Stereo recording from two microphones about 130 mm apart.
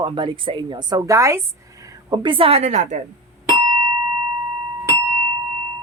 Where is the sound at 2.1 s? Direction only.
40° right (ahead or behind); by 3.0 s 65° right (ahead or behind).